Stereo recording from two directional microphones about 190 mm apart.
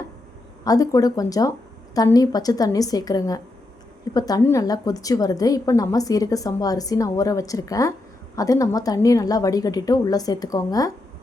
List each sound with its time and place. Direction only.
0.6 s a woman's voice: 20° left (ahead or behind)